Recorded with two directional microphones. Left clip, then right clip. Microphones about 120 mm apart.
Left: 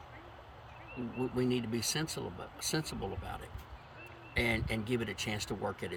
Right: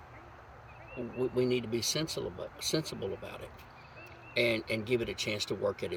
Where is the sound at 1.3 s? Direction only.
25° left (ahead or behind).